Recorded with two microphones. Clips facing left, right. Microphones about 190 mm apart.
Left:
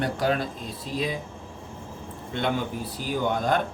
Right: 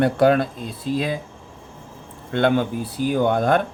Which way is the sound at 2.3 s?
60° right (ahead or behind).